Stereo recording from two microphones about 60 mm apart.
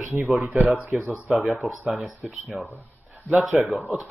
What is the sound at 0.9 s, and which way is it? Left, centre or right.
Speech, right.